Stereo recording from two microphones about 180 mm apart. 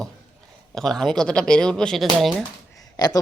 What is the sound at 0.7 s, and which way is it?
Speech, centre (ahead or behind).